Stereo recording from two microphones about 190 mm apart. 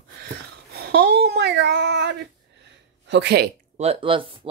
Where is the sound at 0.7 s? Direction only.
60° right (ahead or behind).